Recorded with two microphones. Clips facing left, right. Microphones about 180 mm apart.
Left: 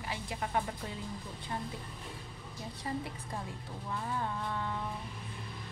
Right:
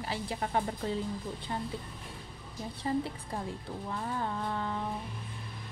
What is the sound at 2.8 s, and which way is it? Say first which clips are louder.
A woman's voice: right 6 dB; 30° right (ahead or behind).